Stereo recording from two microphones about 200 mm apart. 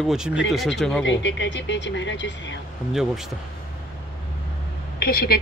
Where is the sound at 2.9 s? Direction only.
Centre (ahead or behind).